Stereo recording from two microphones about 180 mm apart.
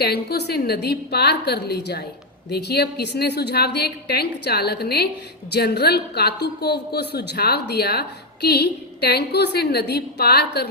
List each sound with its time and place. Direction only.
0.0 s a woman's voice: 60° left (ahead or behind)